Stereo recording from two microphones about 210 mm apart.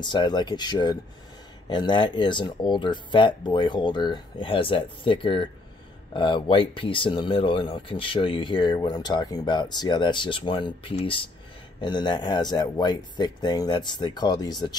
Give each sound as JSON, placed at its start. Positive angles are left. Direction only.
{"t": 0.0, "sound": "speech", "side_deg": 20}